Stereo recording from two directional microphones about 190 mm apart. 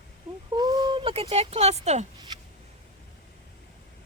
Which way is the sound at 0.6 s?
20° right (ahead or behind).